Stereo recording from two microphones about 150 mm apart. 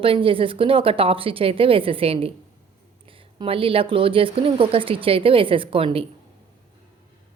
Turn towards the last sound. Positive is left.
turn(degrees=-35)  # may be behind; listen again after turning